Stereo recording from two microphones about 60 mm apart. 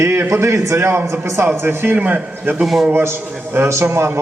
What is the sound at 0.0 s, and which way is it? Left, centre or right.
Speech, right.